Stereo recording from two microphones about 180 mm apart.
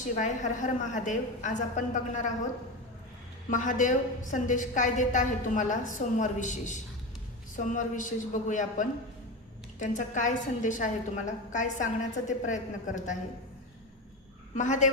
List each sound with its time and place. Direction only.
0.2 s a woman's voice: 45° left (ahead or behind)
3.5 s a woman's voice: 45° left (ahead or behind)
14.5 s a woman's voice: 45° left (ahead or behind)